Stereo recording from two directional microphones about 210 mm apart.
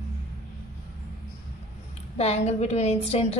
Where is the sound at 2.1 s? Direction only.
30° left (ahead or behind).